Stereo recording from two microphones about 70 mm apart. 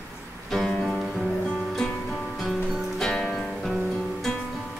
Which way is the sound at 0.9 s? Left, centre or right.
Centre.